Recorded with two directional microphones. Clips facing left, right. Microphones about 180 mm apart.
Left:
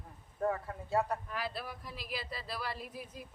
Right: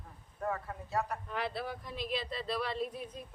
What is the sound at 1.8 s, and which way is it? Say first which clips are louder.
A woman's voice: right 5 dB; 5° left (ahead or behind).